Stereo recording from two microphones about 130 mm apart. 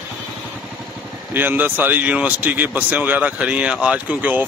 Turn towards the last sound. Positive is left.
turn(degrees=-15)  # may be behind; listen again after turning